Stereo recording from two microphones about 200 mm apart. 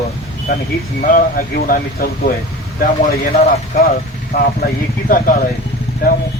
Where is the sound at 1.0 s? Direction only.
45° left (ahead or behind).